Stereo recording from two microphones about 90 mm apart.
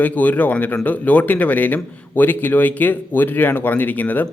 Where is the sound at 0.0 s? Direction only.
20° left (ahead or behind).